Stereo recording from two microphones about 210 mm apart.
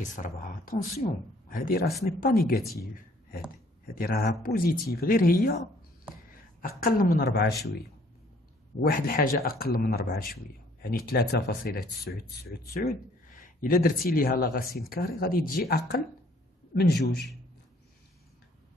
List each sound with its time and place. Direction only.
0.0 s speech: 35° left (ahead or behind)
3.8 s speech: 45° left (ahead or behind)
6.8 s speech: 45° left (ahead or behind)
8.8 s speech: 45° left (ahead or behind)